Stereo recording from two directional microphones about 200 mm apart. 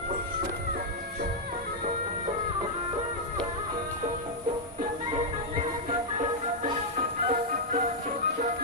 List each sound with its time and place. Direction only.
7.3 s music: 40° right (ahead or behind)